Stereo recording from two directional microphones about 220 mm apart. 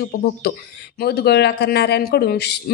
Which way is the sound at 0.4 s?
45° left (ahead or behind).